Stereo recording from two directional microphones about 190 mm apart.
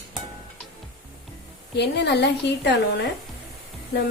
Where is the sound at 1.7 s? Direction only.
65° left (ahead or behind).